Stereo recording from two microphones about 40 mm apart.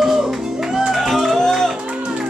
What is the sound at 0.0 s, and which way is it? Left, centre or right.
Music, centre.